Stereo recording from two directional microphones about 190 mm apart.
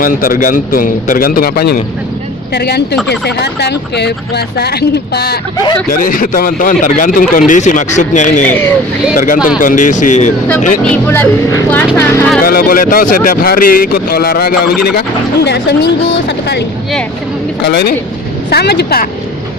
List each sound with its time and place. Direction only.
0.0 s speech: 45° left (ahead or behind)
5.9 s speech: 45° left (ahead or behind)
8.4 s speech: 10° left (ahead or behind)
9.1 s speech: 45° left (ahead or behind)
10.8 s speech: 10° left (ahead or behind)
12.4 s speech: 50° left (ahead or behind)